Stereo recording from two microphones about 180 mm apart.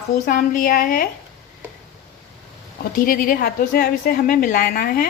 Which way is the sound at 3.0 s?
50° left (ahead or behind).